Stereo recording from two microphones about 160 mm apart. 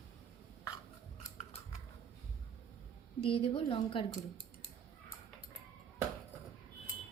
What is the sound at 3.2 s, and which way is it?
Speech, 35° left (ahead or behind).